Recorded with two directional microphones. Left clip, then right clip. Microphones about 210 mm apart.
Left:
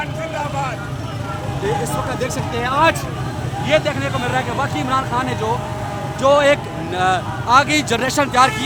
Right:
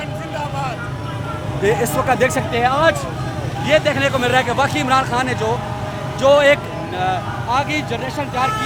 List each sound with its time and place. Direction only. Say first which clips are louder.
1.8 s speech: right 6 dB; 40° right (ahead or behind)
2.6 s speech: even; 20° right (ahead or behind)
6.2 s speech: right 1 dB; 5° left (ahead or behind); by 8.5 s 25° left (ahead or behind)